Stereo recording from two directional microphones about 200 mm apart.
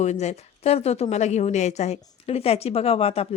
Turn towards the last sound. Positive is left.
turn(degrees=30)  # may be behind; listen again after turning